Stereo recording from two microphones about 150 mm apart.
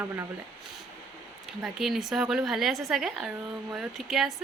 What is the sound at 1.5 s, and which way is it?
Speech, 5° right (ahead or behind).